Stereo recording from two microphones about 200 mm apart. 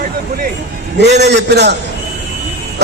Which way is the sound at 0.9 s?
55° right (ahead or behind).